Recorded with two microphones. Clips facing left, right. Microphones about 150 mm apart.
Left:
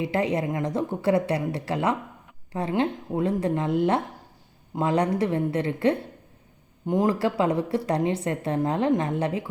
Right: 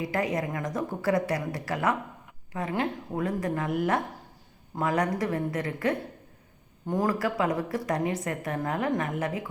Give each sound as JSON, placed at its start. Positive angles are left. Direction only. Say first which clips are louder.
{"t": 0.0, "sound": "a woman's voice", "louder": "left 4 dB", "side_deg": 25}